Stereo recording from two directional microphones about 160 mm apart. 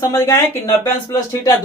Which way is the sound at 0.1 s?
15° left (ahead or behind).